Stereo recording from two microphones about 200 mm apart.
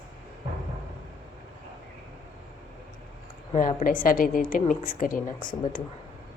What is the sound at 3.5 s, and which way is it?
A woman's voice, 40° left (ahead or behind).